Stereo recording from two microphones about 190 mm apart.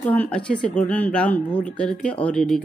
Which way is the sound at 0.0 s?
10° left (ahead or behind).